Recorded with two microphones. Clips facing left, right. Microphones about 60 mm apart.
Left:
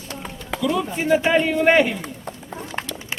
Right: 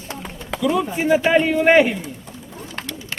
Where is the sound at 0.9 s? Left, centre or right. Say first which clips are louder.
Even; centre.